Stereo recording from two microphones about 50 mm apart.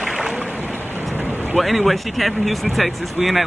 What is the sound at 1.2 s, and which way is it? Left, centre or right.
Boat, right.